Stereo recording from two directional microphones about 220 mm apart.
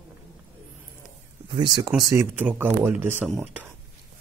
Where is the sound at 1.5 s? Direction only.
20° right (ahead or behind).